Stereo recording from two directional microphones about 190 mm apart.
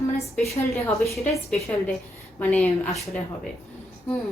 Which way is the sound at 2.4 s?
5° left (ahead or behind).